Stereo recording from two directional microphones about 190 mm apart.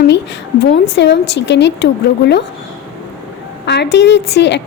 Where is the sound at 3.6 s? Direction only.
60° left (ahead or behind).